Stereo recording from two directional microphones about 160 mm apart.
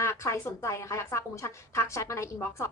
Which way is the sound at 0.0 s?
15° left (ahead or behind).